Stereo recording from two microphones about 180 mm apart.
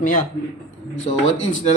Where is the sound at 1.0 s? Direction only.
90° left.